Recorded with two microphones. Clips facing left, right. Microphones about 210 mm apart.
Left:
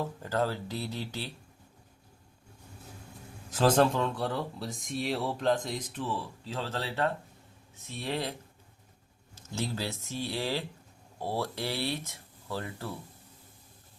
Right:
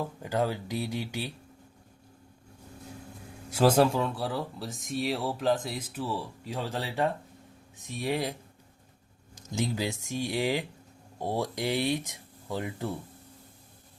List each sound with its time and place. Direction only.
0.0 s speech: 15° right (ahead or behind)
3.5 s speech: 10° right (ahead or behind)